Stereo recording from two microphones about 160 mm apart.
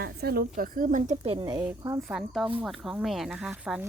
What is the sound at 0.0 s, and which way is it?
A woman's voice, 75° right (ahead or behind).